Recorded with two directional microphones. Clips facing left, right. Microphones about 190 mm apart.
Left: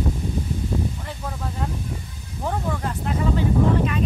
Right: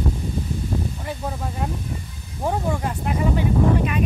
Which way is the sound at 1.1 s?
15° right (ahead or behind).